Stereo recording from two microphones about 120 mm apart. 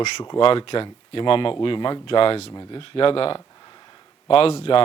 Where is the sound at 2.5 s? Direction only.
35° left (ahead or behind).